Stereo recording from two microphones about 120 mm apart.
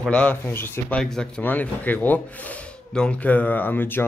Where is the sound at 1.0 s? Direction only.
5° left (ahead or behind).